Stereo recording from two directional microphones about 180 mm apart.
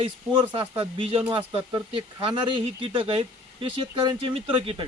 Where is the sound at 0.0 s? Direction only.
30° right (ahead or behind).